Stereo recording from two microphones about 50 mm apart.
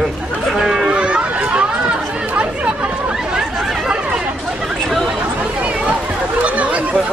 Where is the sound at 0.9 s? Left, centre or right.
Right.